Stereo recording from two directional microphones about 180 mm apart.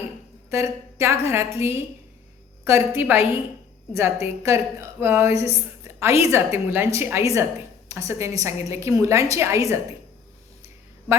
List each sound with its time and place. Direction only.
0.5 s a woman's voice: 15° right (ahead or behind)
5.8 s a sound: 15° right (ahead or behind)
6.2 s a woman's voice: 15° right (ahead or behind)